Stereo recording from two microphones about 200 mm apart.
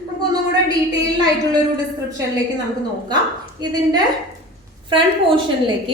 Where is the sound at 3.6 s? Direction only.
20° right (ahead or behind).